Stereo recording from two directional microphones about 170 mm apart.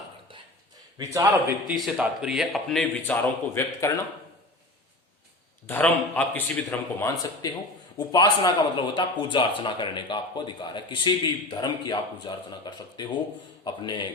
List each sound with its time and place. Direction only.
0.9 s a man's voice: 15° right (ahead or behind)
1.7 s speech: centre (ahead or behind)
3.5 s a man's voice: 15° left (ahead or behind)
5.6 s a man's voice: 10° left (ahead or behind); by 14.1 s 25° left (ahead or behind)